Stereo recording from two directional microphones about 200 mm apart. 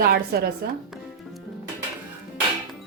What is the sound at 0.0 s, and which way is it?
Speech, 50° right (ahead or behind).